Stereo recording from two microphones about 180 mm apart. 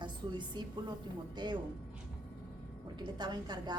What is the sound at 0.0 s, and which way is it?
Speech, 25° right (ahead or behind).